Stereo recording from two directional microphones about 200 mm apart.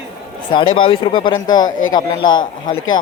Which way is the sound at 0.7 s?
25° left (ahead or behind).